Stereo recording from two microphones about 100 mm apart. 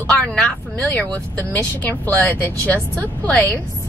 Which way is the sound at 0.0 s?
15° left (ahead or behind).